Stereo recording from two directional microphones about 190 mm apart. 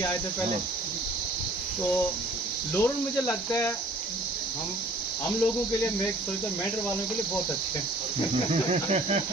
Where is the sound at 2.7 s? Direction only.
10° left (ahead or behind).